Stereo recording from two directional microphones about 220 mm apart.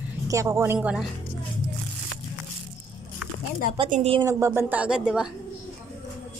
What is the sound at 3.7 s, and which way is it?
Speech, 30° right (ahead or behind).